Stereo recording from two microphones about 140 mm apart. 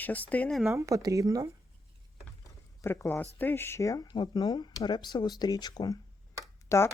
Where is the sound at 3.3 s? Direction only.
15° left (ahead or behind).